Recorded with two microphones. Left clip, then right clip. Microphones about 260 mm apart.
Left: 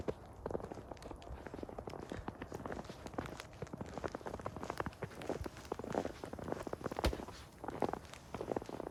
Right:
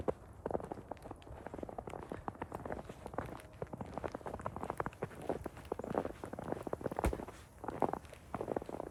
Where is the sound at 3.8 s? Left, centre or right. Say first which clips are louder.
Even; centre.